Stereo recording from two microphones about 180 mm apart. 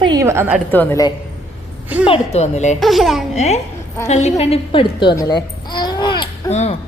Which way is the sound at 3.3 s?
40° left (ahead or behind).